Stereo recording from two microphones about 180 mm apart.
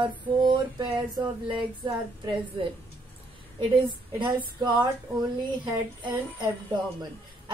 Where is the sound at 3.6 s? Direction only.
25° right (ahead or behind).